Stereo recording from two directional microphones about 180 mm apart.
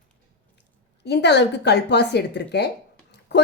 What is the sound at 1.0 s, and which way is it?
A woman's voice, 70° left (ahead or behind).